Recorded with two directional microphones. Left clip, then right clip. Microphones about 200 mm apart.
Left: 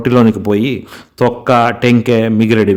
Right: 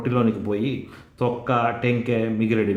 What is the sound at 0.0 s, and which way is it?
Speech, 50° left (ahead or behind).